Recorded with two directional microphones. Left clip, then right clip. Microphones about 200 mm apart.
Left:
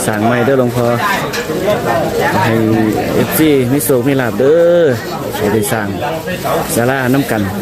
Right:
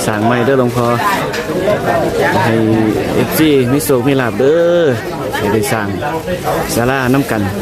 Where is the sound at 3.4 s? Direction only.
Centre (ahead or behind).